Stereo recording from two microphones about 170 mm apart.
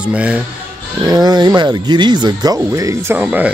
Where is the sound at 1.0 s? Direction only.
25° right (ahead or behind).